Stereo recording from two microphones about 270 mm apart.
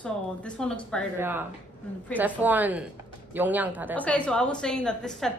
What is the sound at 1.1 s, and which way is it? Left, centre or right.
A woman's voice, centre.